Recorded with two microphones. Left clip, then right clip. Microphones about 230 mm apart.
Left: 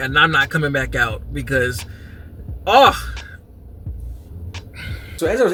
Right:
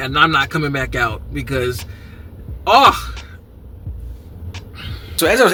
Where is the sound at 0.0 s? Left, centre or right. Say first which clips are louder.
Right 1 dB; centre.